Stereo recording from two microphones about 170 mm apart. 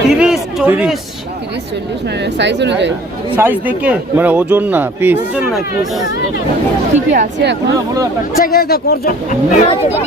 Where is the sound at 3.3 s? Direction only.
10° right (ahead or behind).